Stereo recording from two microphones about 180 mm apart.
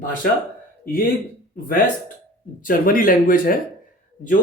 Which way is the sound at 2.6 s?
50° left (ahead or behind).